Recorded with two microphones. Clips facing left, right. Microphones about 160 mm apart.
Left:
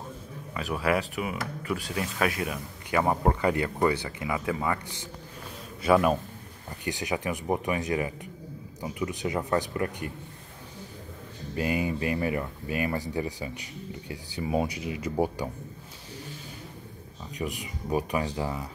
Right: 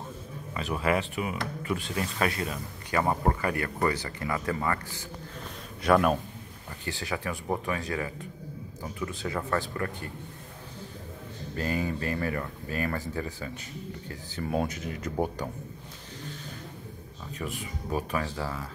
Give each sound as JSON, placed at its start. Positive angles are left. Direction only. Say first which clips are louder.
{"t": 0.6, "sound": "speech", "louder": "left 1 dB", "side_deg": 5}
{"t": 4.2, "sound": "speech", "louder": "left 1 dB", "side_deg": 5}
{"t": 5.8, "sound": "a man's voice", "louder": "left 1 dB", "side_deg": 5}
{"t": 6.8, "sound": "speech", "louder": "left 3 dB", "side_deg": 15}
{"t": 11.5, "sound": "speech", "louder": "left 2 dB", "side_deg": 15}
{"t": 17.4, "sound": "speech", "louder": "left 2 dB", "side_deg": 15}